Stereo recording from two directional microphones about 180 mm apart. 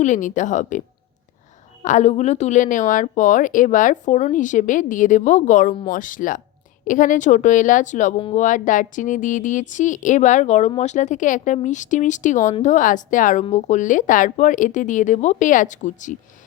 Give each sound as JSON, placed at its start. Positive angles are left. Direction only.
{"t": 0.0, "sound": "speech", "side_deg": 45}
{"t": 1.8, "sound": "speech", "side_deg": 40}